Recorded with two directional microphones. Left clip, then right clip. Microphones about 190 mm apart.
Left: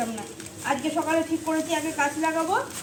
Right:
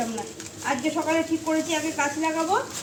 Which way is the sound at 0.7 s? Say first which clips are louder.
Even; centre (ahead or behind).